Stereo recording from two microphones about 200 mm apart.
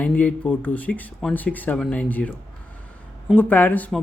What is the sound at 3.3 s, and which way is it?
Speech, 10° left (ahead or behind).